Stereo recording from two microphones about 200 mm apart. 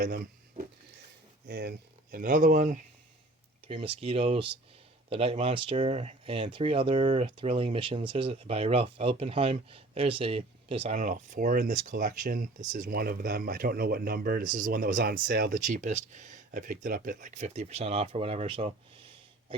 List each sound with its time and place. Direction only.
0.0 s speech: 45° right (ahead or behind)
1.5 s speech: 55° right (ahead or behind)
2.1 s speech: 40° right (ahead or behind)
3.7 s speech: 25° right (ahead or behind)